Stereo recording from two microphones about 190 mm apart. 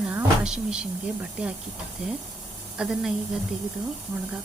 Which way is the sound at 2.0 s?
5° right (ahead or behind).